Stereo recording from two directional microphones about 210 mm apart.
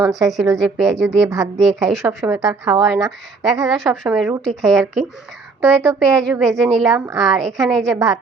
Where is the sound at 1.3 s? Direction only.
15° right (ahead or behind).